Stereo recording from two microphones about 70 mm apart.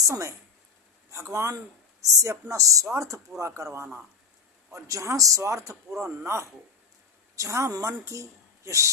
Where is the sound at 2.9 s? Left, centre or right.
Right.